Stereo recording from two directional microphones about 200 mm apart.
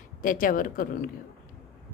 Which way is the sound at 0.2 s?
45° left (ahead or behind).